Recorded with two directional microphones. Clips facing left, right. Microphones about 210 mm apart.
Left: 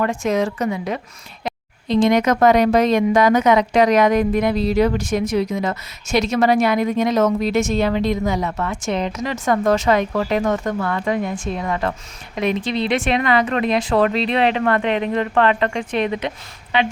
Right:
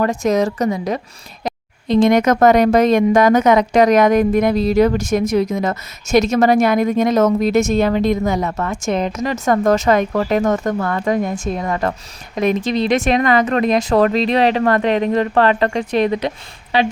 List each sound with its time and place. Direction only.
0.0 s speech: 40° right (ahead or behind)